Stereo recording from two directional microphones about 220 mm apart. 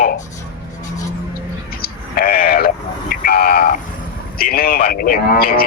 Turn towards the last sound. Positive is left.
turn(degrees=40)  # may be behind; listen again after turning